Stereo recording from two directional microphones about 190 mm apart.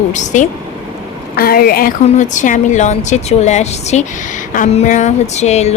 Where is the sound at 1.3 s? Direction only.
50° left (ahead or behind).